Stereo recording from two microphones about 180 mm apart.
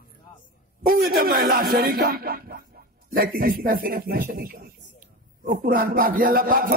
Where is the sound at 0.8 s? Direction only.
55° right (ahead or behind).